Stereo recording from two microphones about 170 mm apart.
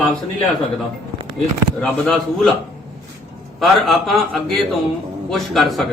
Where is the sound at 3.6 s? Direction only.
Centre (ahead or behind).